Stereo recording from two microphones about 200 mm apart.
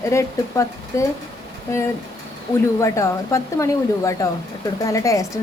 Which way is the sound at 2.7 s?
15° left (ahead or behind).